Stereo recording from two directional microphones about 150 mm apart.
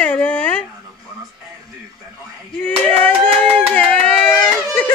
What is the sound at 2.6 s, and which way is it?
Speech, 10° left (ahead or behind).